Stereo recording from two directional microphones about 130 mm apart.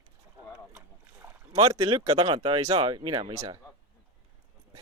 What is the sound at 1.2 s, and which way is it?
Rowboat, 15° right (ahead or behind).